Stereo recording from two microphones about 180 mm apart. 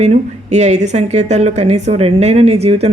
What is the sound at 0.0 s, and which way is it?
A woman's voice, 40° right (ahead or behind).